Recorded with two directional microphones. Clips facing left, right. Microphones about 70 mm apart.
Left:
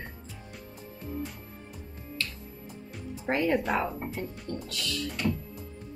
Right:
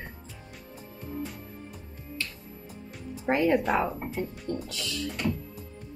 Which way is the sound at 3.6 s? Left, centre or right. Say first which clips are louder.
Right 2 dB; centre.